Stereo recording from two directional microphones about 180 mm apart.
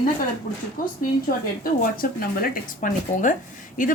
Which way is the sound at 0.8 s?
50° left (ahead or behind).